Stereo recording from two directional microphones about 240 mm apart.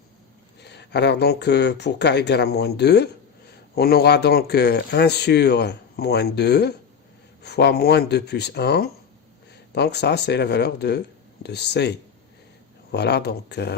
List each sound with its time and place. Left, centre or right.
0.6 s speech: left